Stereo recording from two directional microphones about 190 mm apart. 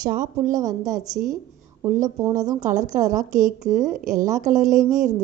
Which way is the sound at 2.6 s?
40° right (ahead or behind).